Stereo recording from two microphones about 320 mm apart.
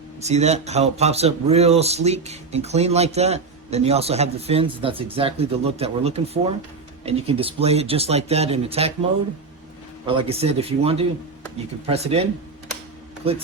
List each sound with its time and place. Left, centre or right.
0.2 s speech: right
10.1 s speech: centre